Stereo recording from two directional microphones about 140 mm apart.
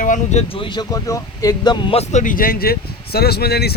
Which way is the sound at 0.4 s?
40° left (ahead or behind).